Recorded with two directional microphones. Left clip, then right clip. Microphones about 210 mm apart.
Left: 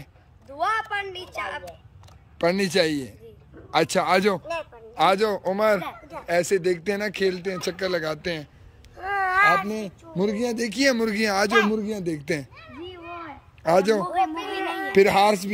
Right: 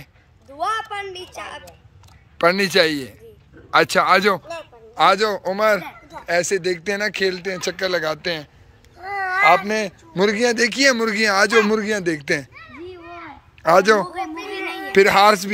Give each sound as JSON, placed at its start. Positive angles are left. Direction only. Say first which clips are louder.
{"t": 0.6, "sound": "a woman's voice", "louder": "right 1 dB", "side_deg": -15}
{"t": 2.3, "sound": "speech", "louder": "right 6 dB", "side_deg": 5}
{"t": 9.0, "sound": "babbling", "louder": "even", "side_deg": 30}
{"t": 9.7, "sound": "speech", "louder": "right 9 dB", "side_deg": 0}
{"t": 13.6, "sound": "a man's voice", "louder": "right 6 dB", "side_deg": 5}